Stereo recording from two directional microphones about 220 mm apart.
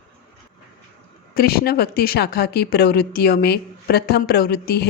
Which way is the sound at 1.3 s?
45° left (ahead or behind).